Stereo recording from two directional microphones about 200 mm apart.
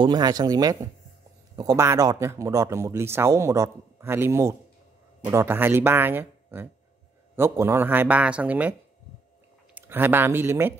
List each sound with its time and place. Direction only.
0.0 s a man's voice: 20° right (ahead or behind)
9.8 s speech: 10° right (ahead or behind)